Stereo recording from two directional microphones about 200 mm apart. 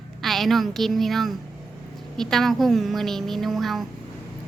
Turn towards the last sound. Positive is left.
turn(degrees=0)  # may be behind; listen again after turning